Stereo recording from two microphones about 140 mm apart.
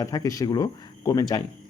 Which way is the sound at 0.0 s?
25° left (ahead or behind).